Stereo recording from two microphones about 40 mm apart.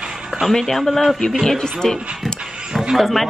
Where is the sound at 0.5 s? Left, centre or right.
Centre.